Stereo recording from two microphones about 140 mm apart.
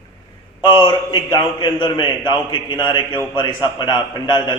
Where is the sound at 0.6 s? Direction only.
30° left (ahead or behind).